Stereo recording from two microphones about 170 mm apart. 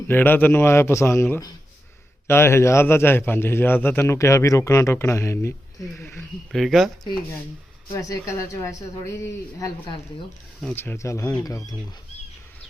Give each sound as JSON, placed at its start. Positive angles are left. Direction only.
{"t": 0.1, "sound": "a man's voice", "side_deg": 10}
{"t": 6.5, "sound": "speech", "side_deg": 0}
{"t": 7.9, "sound": "a man's voice", "side_deg": 20}
{"t": 9.8, "sound": "speech", "side_deg": 30}
{"t": 10.8, "sound": "a man's voice", "side_deg": 15}